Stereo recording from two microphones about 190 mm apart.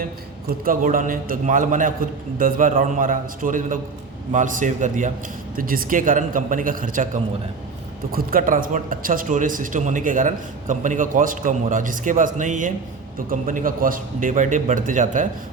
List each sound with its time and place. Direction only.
0.6 s a man's voice: 45° right (ahead or behind)